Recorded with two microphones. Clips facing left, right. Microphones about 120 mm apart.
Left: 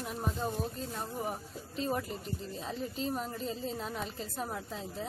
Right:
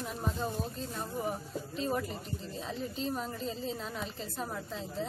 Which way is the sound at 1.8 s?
Centre (ahead or behind).